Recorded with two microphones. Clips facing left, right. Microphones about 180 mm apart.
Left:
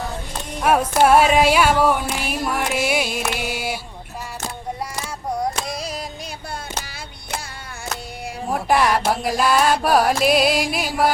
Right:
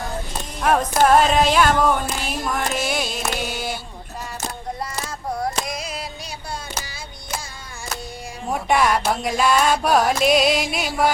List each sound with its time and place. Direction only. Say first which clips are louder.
0.6 s music: left 1 dB; 10° left (ahead or behind)
5.6 s music: left 1 dB; 35° left (ahead or behind)
8.5 s music: left 1 dB; centre (ahead or behind)